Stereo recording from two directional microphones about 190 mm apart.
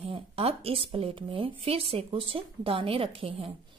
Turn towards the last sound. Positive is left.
turn(degrees=-30)  # may be behind; listen again after turning